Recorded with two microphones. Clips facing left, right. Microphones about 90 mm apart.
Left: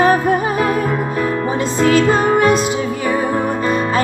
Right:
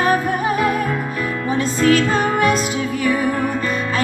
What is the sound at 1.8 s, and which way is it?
Music, 30° left (ahead or behind).